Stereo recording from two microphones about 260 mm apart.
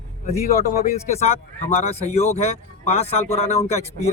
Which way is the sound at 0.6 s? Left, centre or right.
Left.